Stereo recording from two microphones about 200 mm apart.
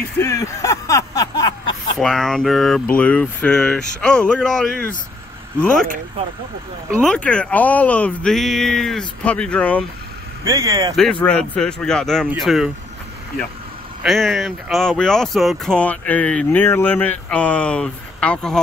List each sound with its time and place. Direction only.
0.2 s a sound: 15° left (ahead or behind)
2.0 s speech: centre (ahead or behind)
7.0 s speech: 5° left (ahead or behind)
10.4 s speech: 15° right (ahead or behind)
11.2 s speech: 5° left (ahead or behind)
14.0 s speech: centre (ahead or behind)